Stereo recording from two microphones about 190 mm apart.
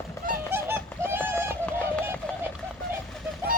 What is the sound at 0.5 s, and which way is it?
Bird, 10° right (ahead or behind).